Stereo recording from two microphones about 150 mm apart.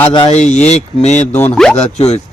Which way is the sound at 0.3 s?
50° left (ahead or behind).